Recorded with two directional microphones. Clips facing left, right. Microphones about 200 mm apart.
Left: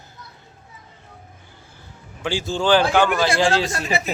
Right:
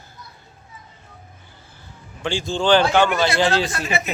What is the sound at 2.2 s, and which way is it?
Speech, 5° left (ahead or behind).